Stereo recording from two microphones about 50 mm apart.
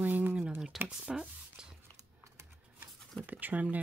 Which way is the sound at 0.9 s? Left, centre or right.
Centre.